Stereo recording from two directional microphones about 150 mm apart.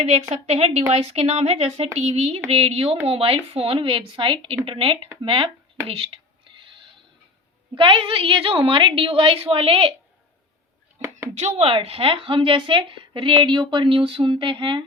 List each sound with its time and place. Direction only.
0.2 s a woman's voice: 45° right (ahead or behind)
7.8 s a woman's voice: 35° right (ahead or behind)
11.3 s a woman's voice: 45° right (ahead or behind)